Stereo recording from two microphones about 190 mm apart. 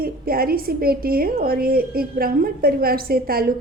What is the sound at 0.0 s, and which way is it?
A woman's voice, 50° right (ahead or behind).